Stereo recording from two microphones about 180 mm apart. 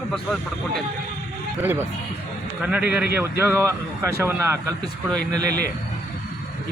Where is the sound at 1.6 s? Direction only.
10° right (ahead or behind).